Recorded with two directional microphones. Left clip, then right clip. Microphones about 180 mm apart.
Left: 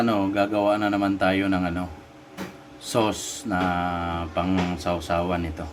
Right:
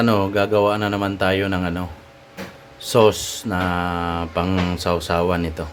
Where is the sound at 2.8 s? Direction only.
55° right (ahead or behind).